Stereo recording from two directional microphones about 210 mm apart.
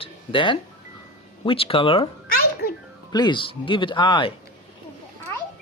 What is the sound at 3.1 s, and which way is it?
Speech, 20° left (ahead or behind).